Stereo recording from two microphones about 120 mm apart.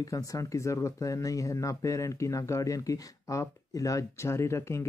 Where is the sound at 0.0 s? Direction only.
30° left (ahead or behind).